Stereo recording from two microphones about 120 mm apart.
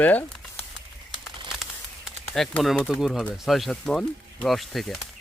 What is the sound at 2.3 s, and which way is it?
Speech, 5° left (ahead or behind).